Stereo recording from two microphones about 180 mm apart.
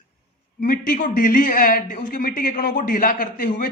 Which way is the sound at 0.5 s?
50° left (ahead or behind).